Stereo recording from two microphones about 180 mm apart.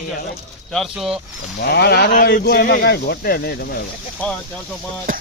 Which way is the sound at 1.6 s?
65° left (ahead or behind).